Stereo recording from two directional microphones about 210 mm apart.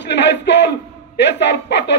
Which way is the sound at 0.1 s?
55° left (ahead or behind).